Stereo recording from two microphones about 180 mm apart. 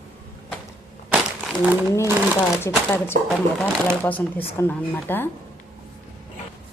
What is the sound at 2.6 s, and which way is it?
Speech, 15° left (ahead or behind).